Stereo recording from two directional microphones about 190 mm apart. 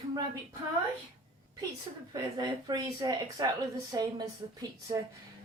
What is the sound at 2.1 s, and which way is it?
A woman's voice, 20° right (ahead or behind).